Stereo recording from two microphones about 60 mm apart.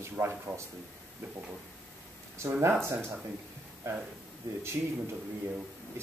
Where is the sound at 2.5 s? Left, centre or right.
Right.